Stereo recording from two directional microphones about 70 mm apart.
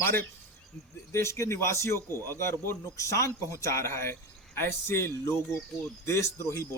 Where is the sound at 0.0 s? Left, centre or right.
Left.